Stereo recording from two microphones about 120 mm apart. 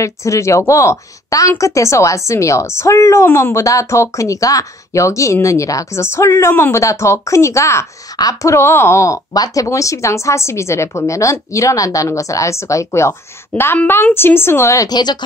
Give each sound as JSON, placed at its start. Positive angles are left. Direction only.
{"t": 0.0, "sound": "speech", "side_deg": 25}